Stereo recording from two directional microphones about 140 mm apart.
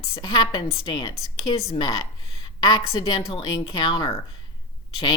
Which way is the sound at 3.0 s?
30° left (ahead or behind).